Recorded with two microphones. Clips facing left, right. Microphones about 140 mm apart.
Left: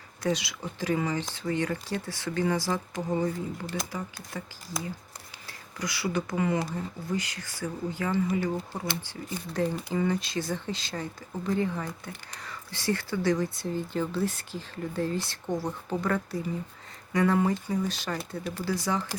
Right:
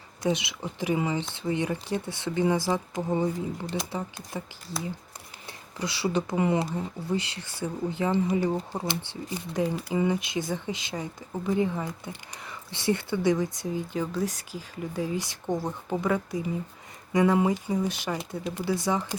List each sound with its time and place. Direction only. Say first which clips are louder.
0.2 s speech: right 2 dB; 20° right (ahead or behind)
5.5 s speech: right 2 dB; 30° right (ahead or behind)
8.7 s speech: right 2 dB; 20° right (ahead or behind)
13.7 s speech: even; 5° right (ahead or behind)